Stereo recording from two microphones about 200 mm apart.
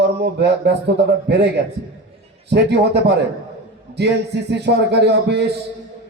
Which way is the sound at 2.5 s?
55° right (ahead or behind).